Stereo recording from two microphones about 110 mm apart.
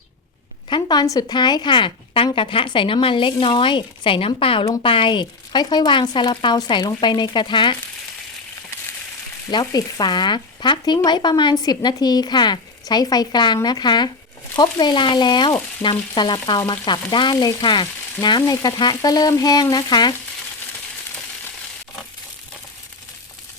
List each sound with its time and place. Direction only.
0.7 s speech: 40° left (ahead or behind)
9.5 s frying: 40° left (ahead or behind)
14.5 s speech: 40° left (ahead or behind)
16.6 s frying: 45° left (ahead or behind)